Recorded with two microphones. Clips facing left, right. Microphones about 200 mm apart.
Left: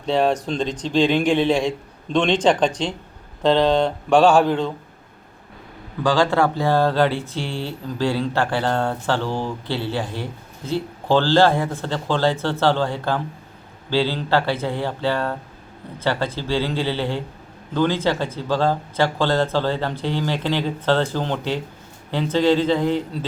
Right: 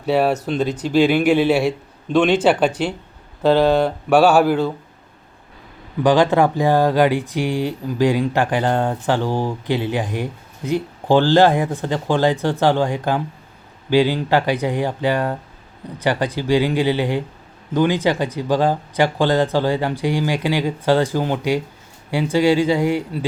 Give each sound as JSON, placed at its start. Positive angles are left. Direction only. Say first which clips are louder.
{"t": 0.0, "sound": "speech", "louder": "right 2 dB", "side_deg": -10}
{"t": 6.0, "sound": "speech", "louder": "right 4 dB", "side_deg": -20}